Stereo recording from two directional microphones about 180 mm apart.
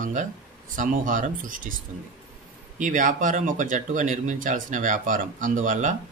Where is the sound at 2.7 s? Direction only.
45° right (ahead or behind).